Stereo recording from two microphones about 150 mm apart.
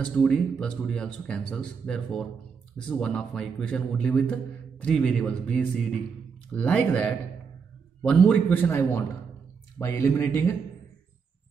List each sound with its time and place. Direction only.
0.0 s a man's voice: 5° left (ahead or behind)